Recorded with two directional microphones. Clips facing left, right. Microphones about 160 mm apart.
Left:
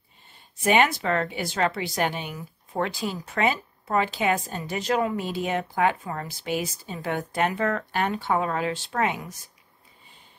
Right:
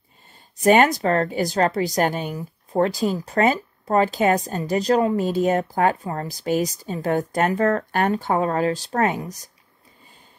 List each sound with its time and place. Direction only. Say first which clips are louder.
0.6 s a woman's voice: right 5 dB; 40° right (ahead or behind)